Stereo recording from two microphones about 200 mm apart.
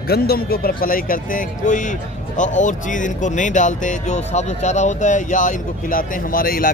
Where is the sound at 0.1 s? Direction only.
50° left (ahead or behind).